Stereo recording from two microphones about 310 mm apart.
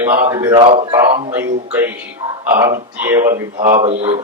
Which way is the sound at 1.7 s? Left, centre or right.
Centre.